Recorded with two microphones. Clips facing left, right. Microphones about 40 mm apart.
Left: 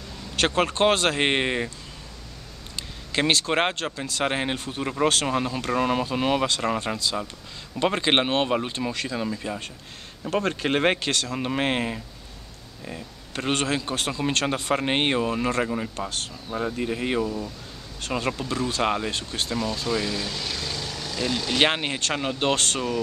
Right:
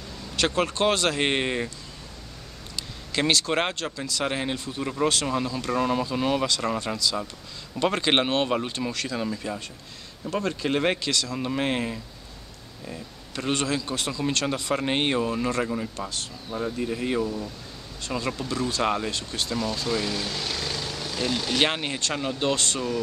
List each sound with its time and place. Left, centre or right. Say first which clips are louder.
0.4 s speech: left 2 dB; left; by 1.7 s centre
2.7 s a man's voice: left 2 dB; left
7.8 s speech: left 1 dB; centre
10.3 s speech: left 2 dB; left
11.3 s speech: left 2 dB; left
13.5 s speech: left 1 dB; left
14.8 s speech: even; left
19.1 s speech: left 1 dB; left
19.5 s speech: left 1 dB; centre
21.5 s speech: left 4 dB; centre